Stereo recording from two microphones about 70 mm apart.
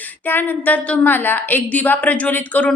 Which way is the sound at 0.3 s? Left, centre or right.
Left.